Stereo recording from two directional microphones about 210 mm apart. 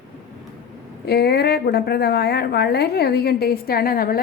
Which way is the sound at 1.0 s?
50° left (ahead or behind).